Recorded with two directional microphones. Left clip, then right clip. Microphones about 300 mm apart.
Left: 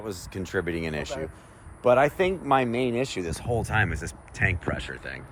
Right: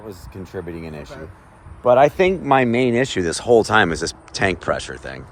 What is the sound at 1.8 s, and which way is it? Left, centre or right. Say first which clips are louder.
Speech: right 7 dB; centre.